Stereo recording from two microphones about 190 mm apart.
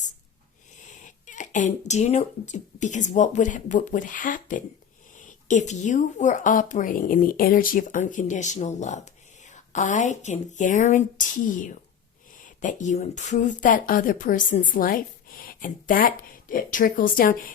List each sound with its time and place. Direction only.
0.9 s speech: 40° left (ahead or behind)